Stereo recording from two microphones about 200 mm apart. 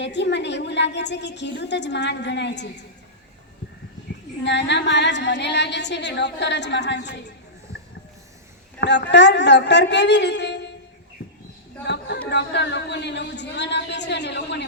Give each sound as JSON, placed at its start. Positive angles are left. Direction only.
{"t": 0.0, "sound": "a woman's voice", "side_deg": 60}
{"t": 4.4, "sound": "a woman's voice", "side_deg": 60}
{"t": 8.8, "sound": "a woman's voice", "side_deg": 60}
{"t": 11.2, "sound": "a sound", "side_deg": 55}
{"t": 12.3, "sound": "a woman's voice", "side_deg": 60}